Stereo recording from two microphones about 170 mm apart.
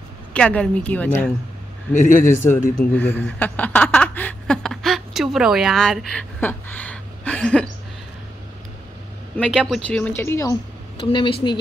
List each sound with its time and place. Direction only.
0.3 s a woman's voice: 5° left (ahead or behind)
2.0 s a man's voice: 50° left (ahead or behind)
2.2 s a woman's voice: 15° left (ahead or behind)
9.4 s speech: 5° left (ahead or behind); by 11.3 s 30° left (ahead or behind)